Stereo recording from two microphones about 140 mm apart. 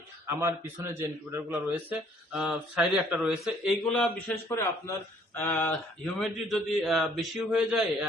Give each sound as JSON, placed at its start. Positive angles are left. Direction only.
{"t": 0.3, "sound": "a man's voice", "side_deg": -15}
{"t": 4.4, "sound": "speech", "side_deg": 15}
{"t": 6.1, "sound": "a man's voice", "side_deg": 0}